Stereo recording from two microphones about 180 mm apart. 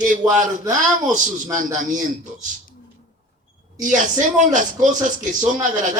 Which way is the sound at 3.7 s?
45° right (ahead or behind).